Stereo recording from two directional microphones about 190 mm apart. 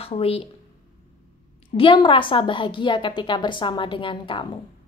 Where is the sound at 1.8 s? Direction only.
25° left (ahead or behind).